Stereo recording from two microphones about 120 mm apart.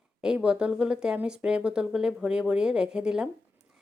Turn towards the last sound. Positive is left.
turn(degrees=-10)  # may be behind; listen again after turning